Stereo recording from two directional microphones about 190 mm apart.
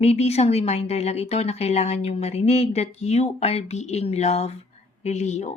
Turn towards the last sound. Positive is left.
turn(degrees=35)  # may be behind; listen again after turning